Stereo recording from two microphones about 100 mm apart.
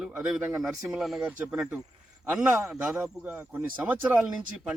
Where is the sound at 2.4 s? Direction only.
25° right (ahead or behind).